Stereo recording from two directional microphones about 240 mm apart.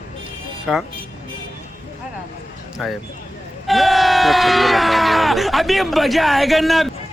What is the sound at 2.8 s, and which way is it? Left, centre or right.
Speech, centre.